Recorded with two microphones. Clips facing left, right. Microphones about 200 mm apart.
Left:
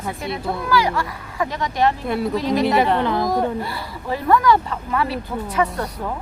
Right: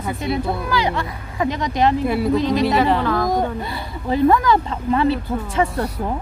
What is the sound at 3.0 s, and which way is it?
Speech, 20° left (ahead or behind).